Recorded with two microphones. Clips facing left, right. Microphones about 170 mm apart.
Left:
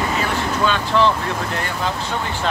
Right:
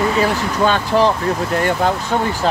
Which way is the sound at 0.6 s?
40° right (ahead or behind).